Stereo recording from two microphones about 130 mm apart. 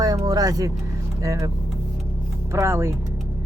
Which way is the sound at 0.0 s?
30° right (ahead or behind).